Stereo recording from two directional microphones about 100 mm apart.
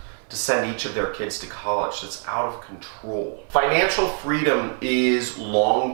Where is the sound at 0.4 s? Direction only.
10° right (ahead or behind).